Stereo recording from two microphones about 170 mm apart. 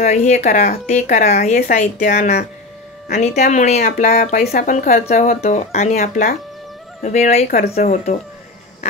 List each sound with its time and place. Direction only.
0.0 s speech: 45° left (ahead or behind)
3.1 s speech: 45° left (ahead or behind)
4.4 s speech: 60° left (ahead or behind); by 5.9 s 40° left (ahead or behind)
5.9 s speech: 55° left (ahead or behind)